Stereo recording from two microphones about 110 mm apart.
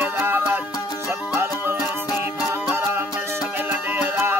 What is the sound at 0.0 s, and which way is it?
Music, 20° right (ahead or behind).